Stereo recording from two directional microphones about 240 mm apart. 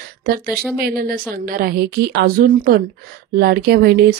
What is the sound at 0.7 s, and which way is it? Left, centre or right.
A woman's voice, right.